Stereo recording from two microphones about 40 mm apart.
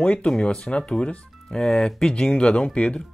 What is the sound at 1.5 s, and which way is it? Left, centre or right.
Speech, centre.